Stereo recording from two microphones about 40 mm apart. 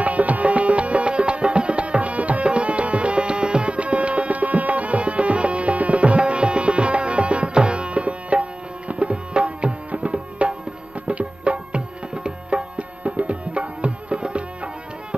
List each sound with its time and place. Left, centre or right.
0.0 s music: right